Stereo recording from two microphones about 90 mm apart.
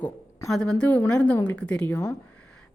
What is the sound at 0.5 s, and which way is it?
Speech, 10° left (ahead or behind).